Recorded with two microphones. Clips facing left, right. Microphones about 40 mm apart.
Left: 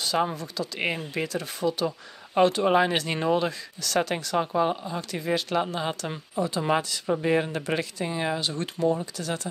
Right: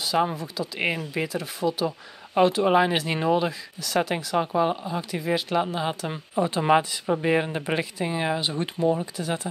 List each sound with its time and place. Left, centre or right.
0.0 s speech: centre
6.3 s speech: right